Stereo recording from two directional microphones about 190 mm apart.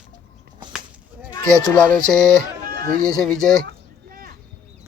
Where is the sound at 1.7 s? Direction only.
5° left (ahead or behind).